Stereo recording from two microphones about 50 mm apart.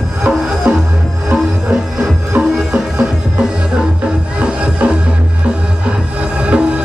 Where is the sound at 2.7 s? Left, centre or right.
Centre.